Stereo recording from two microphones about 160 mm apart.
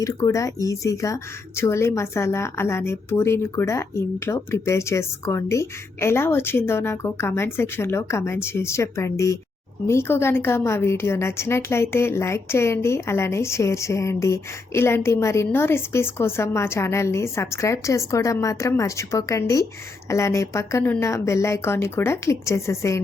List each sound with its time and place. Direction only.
0.0 s a woman's voice: 20° left (ahead or behind)